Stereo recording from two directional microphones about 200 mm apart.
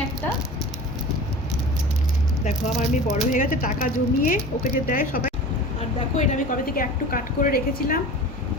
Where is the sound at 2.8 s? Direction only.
35° left (ahead or behind).